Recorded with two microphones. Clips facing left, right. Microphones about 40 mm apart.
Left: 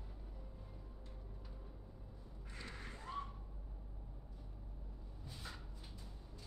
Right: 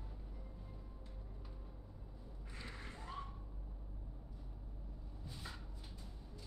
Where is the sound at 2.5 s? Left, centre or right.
Centre.